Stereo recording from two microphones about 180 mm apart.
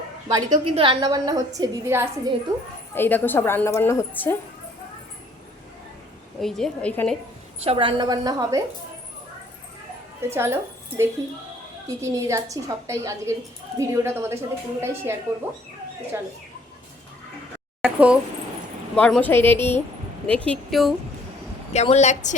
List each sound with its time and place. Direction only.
0.3 s a woman's voice: 20° right (ahead or behind)
0.6 s a woman's voice: 30° right (ahead or behind); by 2.3 s 15° right (ahead or behind)
2.9 s a woman's voice: 10° left (ahead or behind)
6.4 s a woman's voice: 5° left (ahead or behind)
7.6 s a woman's voice: 30° right (ahead or behind)
10.2 s a woman's voice: 15° right (ahead or behind)
11.9 s a woman's voice: 15° right (ahead or behind)
16.1 s a woman's voice: 15° right (ahead or behind)
17.8 s speech: 5° right (ahead or behind)
18.9 s a woman's voice: 5° left (ahead or behind)
21.7 s a woman's voice: 40° left (ahead or behind)